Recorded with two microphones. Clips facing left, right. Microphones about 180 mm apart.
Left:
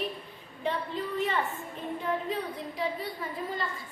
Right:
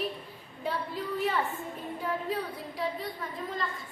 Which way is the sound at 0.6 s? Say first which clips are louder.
Left 2 dB; 5° right (ahead or behind).